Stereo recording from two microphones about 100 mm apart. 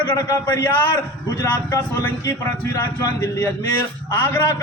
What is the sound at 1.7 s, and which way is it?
A man's voice, 30° left (ahead or behind).